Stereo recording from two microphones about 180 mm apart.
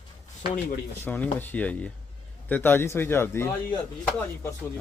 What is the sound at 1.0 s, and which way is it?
Speech, 10° left (ahead or behind).